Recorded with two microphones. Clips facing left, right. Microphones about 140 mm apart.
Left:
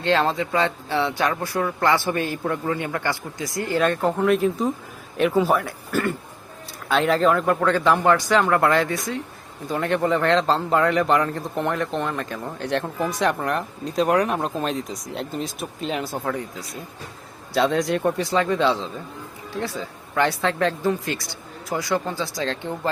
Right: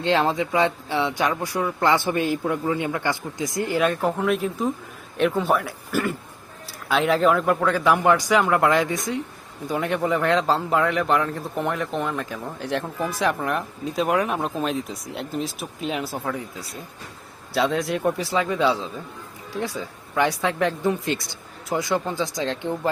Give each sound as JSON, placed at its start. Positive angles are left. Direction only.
{"t": 0.0, "sound": "speech", "side_deg": -15}
{"t": 3.8, "sound": "a man's voice", "side_deg": 0}